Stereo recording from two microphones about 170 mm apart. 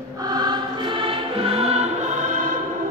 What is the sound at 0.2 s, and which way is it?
Choir, 25° right (ahead or behind).